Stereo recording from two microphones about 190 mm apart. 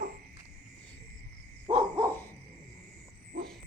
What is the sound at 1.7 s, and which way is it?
Dog, 30° right (ahead or behind).